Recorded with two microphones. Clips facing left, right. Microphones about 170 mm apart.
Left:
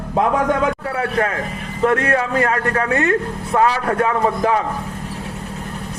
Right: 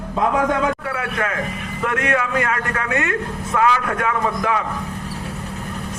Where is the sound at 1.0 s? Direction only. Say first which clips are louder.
Left 4 dB; 35° left (ahead or behind).